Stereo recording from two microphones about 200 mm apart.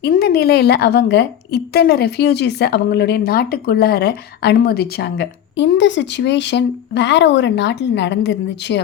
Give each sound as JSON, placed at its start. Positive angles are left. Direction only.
{"t": 0.0, "sound": "a woman's voice", "side_deg": 50}